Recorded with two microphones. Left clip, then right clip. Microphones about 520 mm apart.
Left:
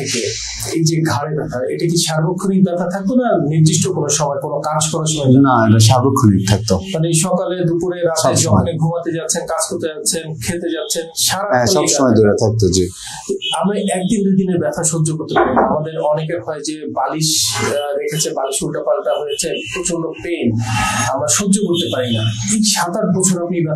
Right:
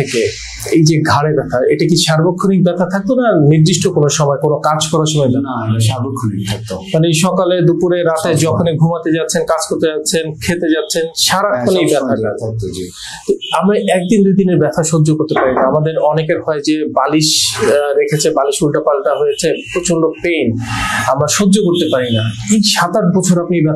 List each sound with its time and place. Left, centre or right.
0.7 s speech: right
6.9 s speech: right
9.1 s speech: right
11.5 s speech: left
13.7 s speech: right
16.3 s speech: right
21.2 s speech: right